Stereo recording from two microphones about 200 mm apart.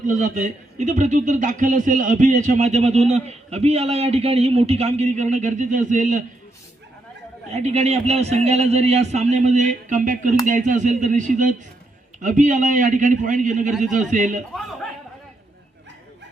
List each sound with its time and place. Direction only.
0.0 s a man's voice: 40° right (ahead or behind)
7.5 s a man's voice: 35° right (ahead or behind)